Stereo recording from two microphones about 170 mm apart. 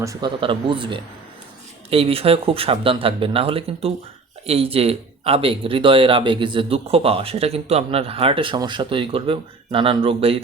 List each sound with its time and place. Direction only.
0.0 s speech: 20° right (ahead or behind)
0.3 s speech: 30° right (ahead or behind)